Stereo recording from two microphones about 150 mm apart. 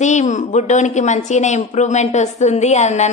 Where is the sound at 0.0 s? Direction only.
50° left (ahead or behind).